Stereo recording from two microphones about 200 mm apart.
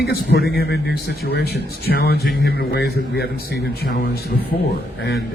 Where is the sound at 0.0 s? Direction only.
50° left (ahead or behind).